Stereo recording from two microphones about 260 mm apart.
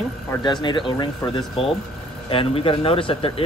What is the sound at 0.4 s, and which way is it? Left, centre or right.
Speech, centre.